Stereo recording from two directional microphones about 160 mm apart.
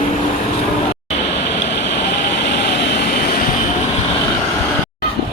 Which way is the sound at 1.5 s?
90° left.